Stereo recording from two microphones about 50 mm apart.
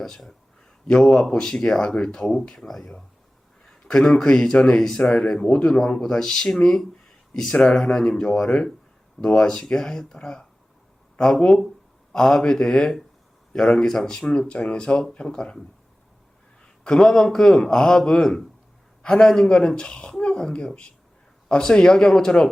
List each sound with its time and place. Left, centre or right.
0.0 s speech: centre
16.8 s speech: centre